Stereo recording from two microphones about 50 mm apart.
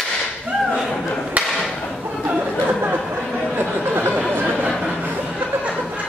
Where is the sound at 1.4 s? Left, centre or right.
Right.